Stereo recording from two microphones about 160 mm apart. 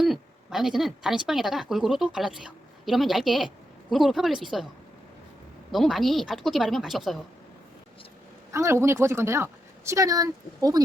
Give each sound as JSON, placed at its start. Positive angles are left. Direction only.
{"t": 0.0, "sound": "a woman's voice", "side_deg": 0}
{"t": 5.7, "sound": "a woman's voice", "side_deg": 0}
{"t": 8.5, "sound": "speech", "side_deg": -15}